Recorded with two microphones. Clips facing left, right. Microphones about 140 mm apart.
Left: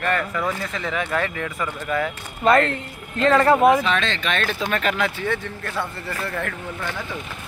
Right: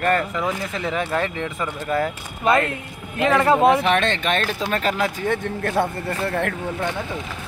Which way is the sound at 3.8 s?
55° right (ahead or behind).